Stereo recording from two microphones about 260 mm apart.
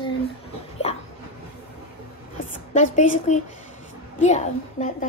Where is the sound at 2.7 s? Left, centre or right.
Left.